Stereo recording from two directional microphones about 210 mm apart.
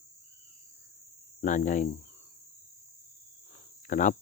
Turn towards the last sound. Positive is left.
turn(degrees=35)  # may be behind; listen again after turning